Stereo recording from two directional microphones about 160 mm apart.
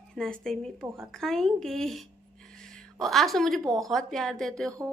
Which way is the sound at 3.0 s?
Centre (ahead or behind).